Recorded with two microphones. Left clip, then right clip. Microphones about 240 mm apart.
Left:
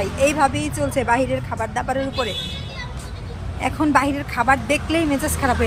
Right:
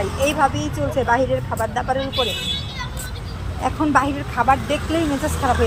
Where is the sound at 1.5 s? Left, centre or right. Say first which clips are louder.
Right 2 dB; left.